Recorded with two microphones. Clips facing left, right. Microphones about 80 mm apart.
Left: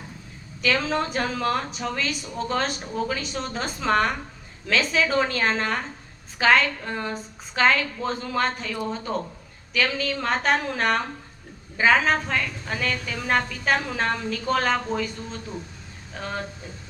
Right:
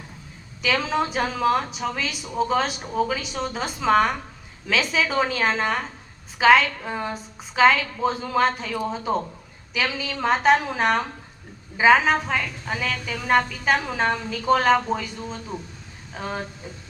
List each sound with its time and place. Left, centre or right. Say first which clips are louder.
0.6 s a woman's voice: right 1 dB; centre